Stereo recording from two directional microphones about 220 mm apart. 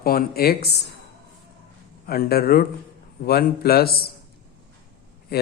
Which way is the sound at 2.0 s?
45° left (ahead or behind).